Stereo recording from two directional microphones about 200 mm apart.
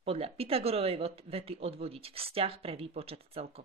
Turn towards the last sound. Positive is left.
turn(degrees=-30)  # may be behind; listen again after turning